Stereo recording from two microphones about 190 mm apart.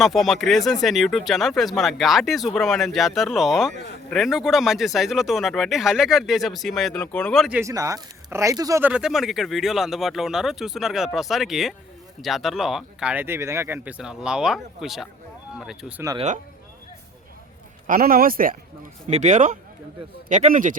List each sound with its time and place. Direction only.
0.0 s speech: centre (ahead or behind)
7.6 s speech: 15° right (ahead or behind)
8.9 s speech: 5° right (ahead or behind)
17.8 s a man's voice: 45° right (ahead or behind)